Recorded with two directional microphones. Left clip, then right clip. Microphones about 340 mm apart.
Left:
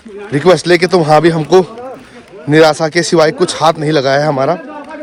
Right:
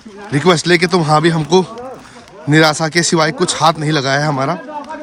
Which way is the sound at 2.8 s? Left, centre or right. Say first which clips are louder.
Left 4 dB; centre.